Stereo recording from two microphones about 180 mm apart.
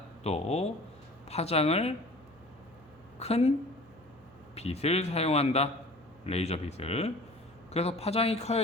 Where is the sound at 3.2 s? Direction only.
35° left (ahead or behind).